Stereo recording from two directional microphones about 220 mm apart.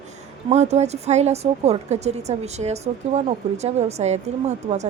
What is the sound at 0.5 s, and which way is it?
Speech, 30° right (ahead or behind).